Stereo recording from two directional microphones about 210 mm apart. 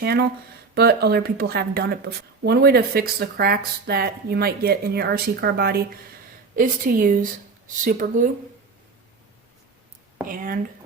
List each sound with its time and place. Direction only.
0.0 s a woman's voice: 50° right (ahead or behind)
10.2 s a woman's voice: 40° right (ahead or behind)